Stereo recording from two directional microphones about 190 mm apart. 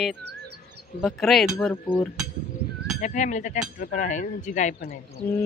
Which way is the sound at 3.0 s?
40° left (ahead or behind).